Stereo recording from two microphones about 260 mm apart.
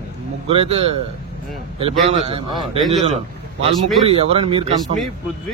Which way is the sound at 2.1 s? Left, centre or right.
Right.